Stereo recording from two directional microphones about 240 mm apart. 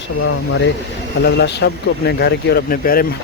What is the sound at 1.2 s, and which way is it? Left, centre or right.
Speech, left.